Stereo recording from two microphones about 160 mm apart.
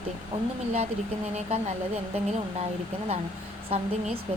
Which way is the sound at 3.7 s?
40° right (ahead or behind).